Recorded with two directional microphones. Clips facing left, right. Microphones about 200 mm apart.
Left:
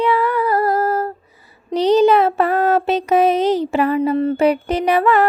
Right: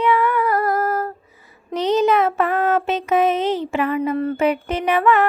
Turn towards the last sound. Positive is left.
turn(degrees=35)  # may be behind; listen again after turning